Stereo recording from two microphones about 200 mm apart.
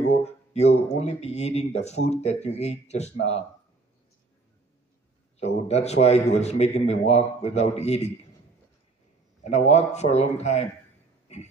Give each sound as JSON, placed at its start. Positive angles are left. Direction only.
{"t": 0.0, "sound": "a sound", "side_deg": 35}
{"t": 0.9, "sound": "a man's voice", "side_deg": 30}
{"t": 5.4, "sound": "a man's voice", "side_deg": 30}
{"t": 9.5, "sound": "a man's voice", "side_deg": 35}